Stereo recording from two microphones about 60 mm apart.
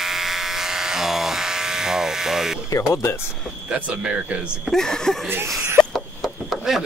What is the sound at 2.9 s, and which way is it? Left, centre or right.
Speech, left.